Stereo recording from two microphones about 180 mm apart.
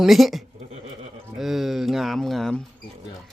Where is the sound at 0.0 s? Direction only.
Centre (ahead or behind).